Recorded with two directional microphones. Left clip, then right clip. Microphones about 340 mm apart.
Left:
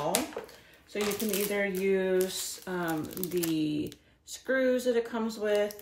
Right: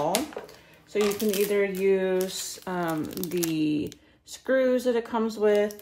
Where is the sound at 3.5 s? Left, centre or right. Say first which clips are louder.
Right 4 dB; centre.